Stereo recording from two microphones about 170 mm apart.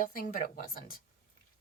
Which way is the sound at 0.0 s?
55° left (ahead or behind).